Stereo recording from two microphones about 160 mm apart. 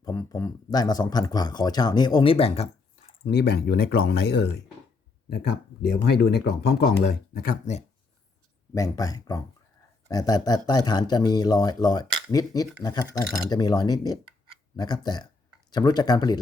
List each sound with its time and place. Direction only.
0.0 s speech: 20° left (ahead or behind)
3.2 s speech: 90° left
5.8 s speech: 80° left; by 7.9 s 50° left (ahead or behind)
8.7 s speech: 20° left (ahead or behind)